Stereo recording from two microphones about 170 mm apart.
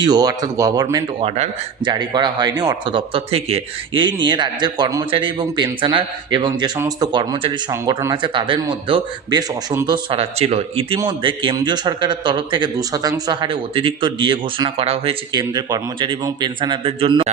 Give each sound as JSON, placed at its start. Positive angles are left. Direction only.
{"t": 0.0, "sound": "a man's voice", "side_deg": -25}
{"t": 1.2, "sound": "a man's voice", "side_deg": -35}